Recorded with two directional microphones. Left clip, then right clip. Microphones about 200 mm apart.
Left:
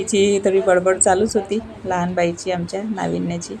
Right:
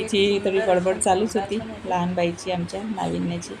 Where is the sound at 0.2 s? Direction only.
35° left (ahead or behind).